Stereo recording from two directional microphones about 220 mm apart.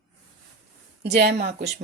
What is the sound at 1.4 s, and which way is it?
Speech, 35° right (ahead or behind).